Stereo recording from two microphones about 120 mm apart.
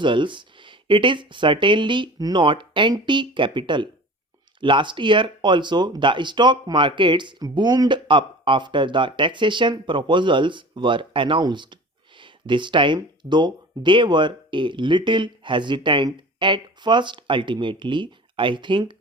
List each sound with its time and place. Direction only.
0.0 s speech: 40° right (ahead or behind)